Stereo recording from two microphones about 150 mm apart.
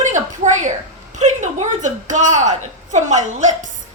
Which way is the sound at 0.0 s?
55° right (ahead or behind).